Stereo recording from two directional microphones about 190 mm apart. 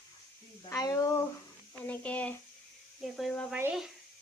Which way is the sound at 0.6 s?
20° left (ahead or behind).